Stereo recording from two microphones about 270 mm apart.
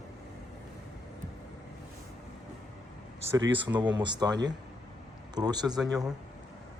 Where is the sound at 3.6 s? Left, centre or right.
Centre.